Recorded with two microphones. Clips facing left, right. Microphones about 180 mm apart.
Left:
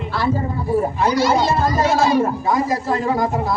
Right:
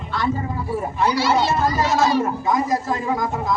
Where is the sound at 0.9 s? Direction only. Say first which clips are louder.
Right 2 dB; 45° left (ahead or behind).